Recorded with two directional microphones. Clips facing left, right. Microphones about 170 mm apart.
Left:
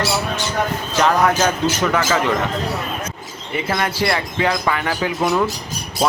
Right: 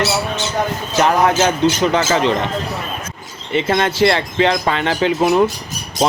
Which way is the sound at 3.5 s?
25° right (ahead or behind).